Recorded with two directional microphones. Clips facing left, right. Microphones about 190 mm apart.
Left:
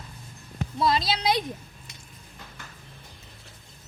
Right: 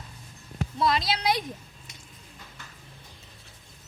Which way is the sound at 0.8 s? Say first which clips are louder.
Left 1 dB; 30° left (ahead or behind).